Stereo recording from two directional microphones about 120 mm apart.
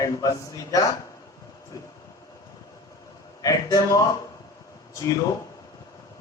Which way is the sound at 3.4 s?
25° left (ahead or behind).